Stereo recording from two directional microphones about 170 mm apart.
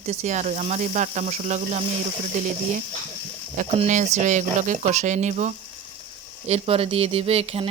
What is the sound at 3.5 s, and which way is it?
Speech, 45° right (ahead or behind).